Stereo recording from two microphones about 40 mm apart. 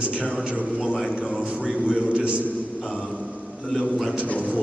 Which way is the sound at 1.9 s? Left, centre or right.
Right.